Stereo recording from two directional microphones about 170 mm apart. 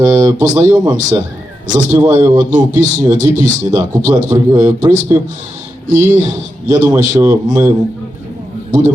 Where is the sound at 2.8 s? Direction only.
45° right (ahead or behind).